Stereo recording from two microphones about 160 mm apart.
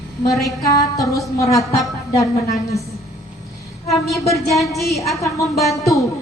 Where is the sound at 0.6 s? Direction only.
20° left (ahead or behind).